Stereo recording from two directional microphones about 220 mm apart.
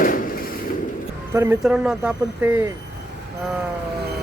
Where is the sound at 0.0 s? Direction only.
40° left (ahead or behind).